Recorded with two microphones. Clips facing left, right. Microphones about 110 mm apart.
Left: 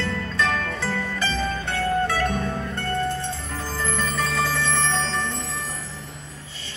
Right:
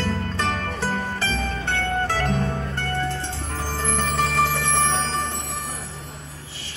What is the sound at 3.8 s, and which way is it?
Music, 70° right (ahead or behind).